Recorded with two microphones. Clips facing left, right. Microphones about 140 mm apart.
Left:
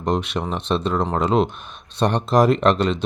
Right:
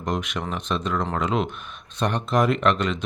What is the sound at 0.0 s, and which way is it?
Speech, 30° left (ahead or behind).